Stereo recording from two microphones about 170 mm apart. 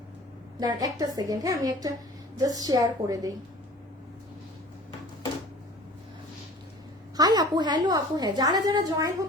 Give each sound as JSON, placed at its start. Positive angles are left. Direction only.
{"t": 0.6, "sound": "a woman's voice", "side_deg": -25}
{"t": 7.2, "sound": "a woman's voice", "side_deg": -25}